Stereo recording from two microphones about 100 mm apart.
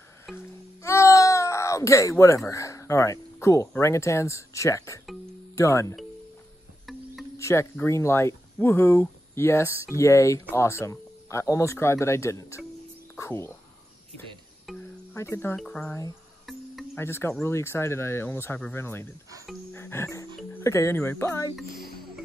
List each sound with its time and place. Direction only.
0.3 s music: centre (ahead or behind)
0.8 s a sound: 30° left (ahead or behind)
3.8 s speech: 30° left (ahead or behind)
7.3 s music: 30° left (ahead or behind)
7.7 s speech: 25° left (ahead or behind)
14.7 s music: centre (ahead or behind)
15.1 s speech: 25° left (ahead or behind)
15.5 s speech: 10° left (ahead or behind)
16.9 s speech: 25° left (ahead or behind)
19.7 s music: 25° left (ahead or behind)
20.6 s speech: 30° left (ahead or behind)